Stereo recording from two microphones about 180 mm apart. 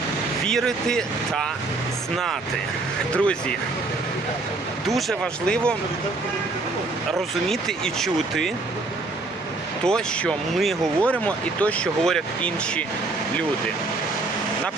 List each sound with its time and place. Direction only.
0.4 s speech: 5° left (ahead or behind)
3.1 s speech: 5° left (ahead or behind)
4.9 s speech: centre (ahead or behind)
7.4 s speech: centre (ahead or behind)
9.8 s speech: 5° left (ahead or behind)